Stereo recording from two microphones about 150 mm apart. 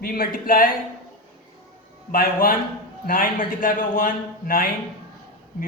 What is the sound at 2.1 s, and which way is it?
A man's voice, 75° left (ahead or behind).